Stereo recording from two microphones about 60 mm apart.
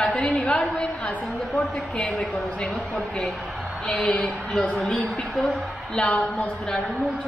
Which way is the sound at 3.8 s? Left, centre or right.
Centre.